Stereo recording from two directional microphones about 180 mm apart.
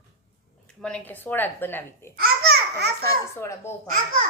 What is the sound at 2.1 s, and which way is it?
Speech, 65° right (ahead or behind).